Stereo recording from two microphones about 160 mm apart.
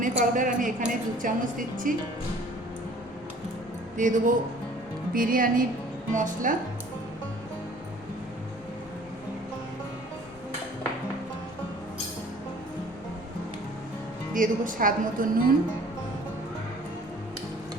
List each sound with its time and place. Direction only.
0.0 s a woman's voice: 55° right (ahead or behind)
3.9 s a woman's voice: 55° right (ahead or behind)
14.3 s a woman's voice: 55° right (ahead or behind)